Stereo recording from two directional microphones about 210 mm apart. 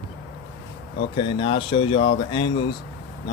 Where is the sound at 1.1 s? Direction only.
25° left (ahead or behind).